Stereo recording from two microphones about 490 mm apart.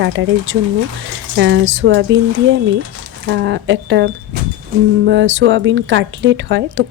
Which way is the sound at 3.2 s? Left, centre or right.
Right.